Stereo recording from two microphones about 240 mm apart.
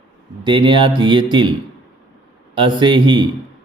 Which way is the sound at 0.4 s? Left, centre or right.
Centre.